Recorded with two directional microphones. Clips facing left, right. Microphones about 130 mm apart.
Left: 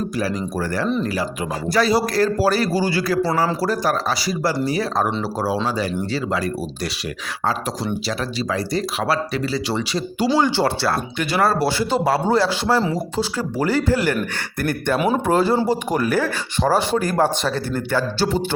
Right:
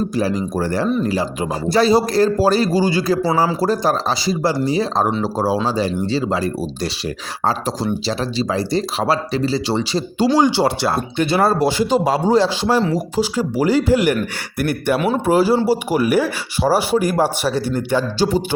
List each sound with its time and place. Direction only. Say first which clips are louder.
0.2 s speech: right 3 dB; 25° right (ahead or behind)
8.0 s speech: right 3 dB; 30° right (ahead or behind)
10.3 s speech: right 3 dB; 15° right (ahead or behind)
14.9 s speech: left 1 dB; 10° left (ahead or behind)
15.3 s speech: right 5 dB; 10° right (ahead or behind)